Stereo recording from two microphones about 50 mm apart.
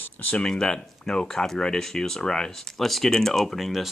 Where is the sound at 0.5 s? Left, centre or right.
Centre.